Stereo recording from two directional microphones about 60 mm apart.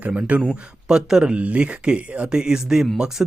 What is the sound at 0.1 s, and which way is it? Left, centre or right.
A man's voice, right.